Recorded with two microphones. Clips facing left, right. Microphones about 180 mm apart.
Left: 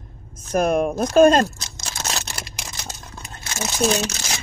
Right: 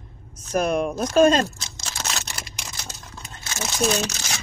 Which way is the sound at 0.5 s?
45° left (ahead or behind).